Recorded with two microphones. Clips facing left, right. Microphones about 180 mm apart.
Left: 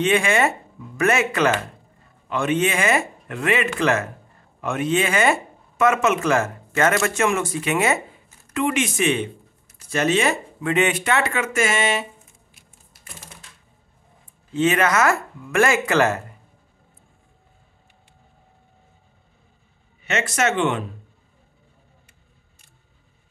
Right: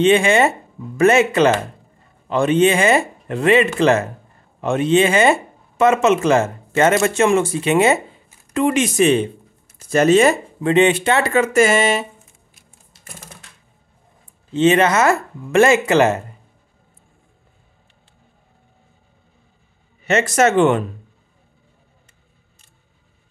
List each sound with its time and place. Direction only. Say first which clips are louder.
0.0 s speech: right 5 dB; 25° right (ahead or behind)
8.5 s speech: right 6 dB; 35° right (ahead or behind)
10.7 s speech: right 6 dB; 30° right (ahead or behind)
14.5 s speech: right 5 dB; 25° right (ahead or behind)
20.0 s speech: right 7 dB; 40° right (ahead or behind)